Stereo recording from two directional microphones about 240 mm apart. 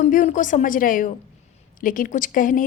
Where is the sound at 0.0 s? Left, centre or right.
Left.